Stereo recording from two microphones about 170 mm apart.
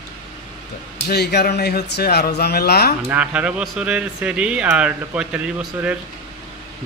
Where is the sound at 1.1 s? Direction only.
75° left (ahead or behind).